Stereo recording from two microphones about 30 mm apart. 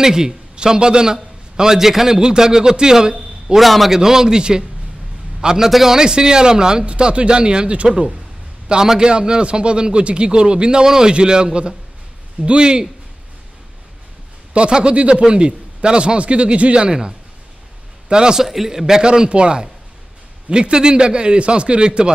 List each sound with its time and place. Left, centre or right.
0.0 s a man's voice: right
3.5 s a man's voice: centre
3.9 s a man's voice: centre
5.7 s a man's voice: centre
5.9 s a man's voice: right
6.9 s a man's voice: right
14.7 s speech: right
18.1 s a man's voice: right
18.4 s a man's voice: centre
19.0 s speech: right